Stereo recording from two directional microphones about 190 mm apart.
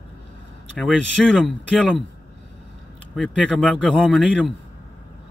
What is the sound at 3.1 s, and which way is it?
Speech, 5° left (ahead or behind).